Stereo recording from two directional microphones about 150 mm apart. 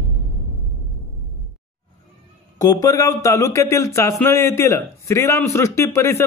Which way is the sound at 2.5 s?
25° left (ahead or behind).